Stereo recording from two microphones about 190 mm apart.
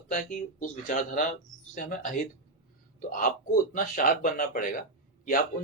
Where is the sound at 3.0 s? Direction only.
45° left (ahead or behind).